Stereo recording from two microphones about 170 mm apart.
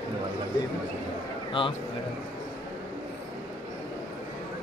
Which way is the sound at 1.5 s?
30° left (ahead or behind).